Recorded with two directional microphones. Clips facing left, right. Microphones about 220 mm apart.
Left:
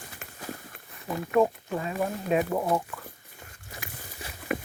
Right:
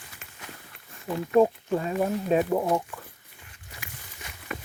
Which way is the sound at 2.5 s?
10° right (ahead or behind).